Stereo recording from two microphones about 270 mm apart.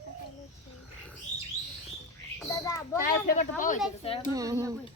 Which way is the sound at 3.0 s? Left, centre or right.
Left.